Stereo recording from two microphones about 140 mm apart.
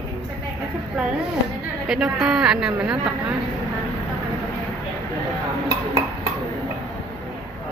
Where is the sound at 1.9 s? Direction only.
5° right (ahead or behind).